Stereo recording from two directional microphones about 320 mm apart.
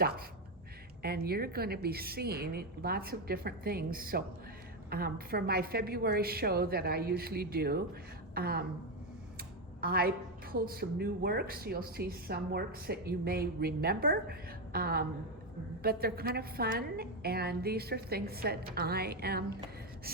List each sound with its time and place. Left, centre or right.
0.0 s speech: right
9.8 s a woman's voice: right